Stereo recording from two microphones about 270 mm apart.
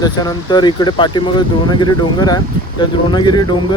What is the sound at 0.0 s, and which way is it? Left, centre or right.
Speech, centre.